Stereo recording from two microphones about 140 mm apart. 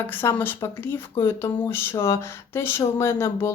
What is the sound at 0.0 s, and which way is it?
Speech, 15° left (ahead or behind).